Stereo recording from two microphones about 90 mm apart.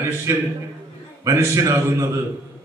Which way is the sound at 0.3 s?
30° right (ahead or behind).